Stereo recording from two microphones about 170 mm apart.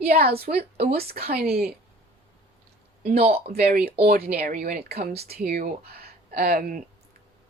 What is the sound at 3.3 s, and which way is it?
Speech, 65° right (ahead or behind).